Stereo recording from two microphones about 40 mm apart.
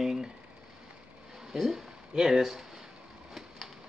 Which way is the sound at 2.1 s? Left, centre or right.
Centre.